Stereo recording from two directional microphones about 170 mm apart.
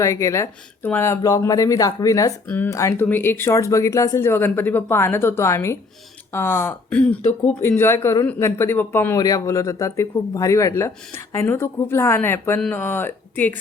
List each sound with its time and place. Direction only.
0.0 s speech: 20° left (ahead or behind)